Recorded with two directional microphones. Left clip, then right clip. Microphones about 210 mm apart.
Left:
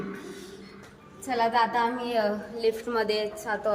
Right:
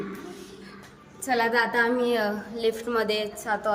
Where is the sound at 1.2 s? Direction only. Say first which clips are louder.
Right 2 dB; 20° right (ahead or behind).